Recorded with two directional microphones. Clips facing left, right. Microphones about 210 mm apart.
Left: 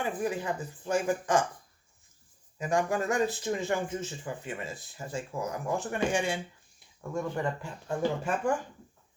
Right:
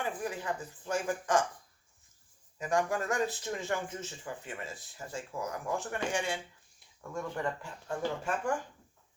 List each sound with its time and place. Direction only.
0.0 s speech: 20° left (ahead or behind)
0.9 s speech: 10° left (ahead or behind)
2.6 s speech: 10° left (ahead or behind)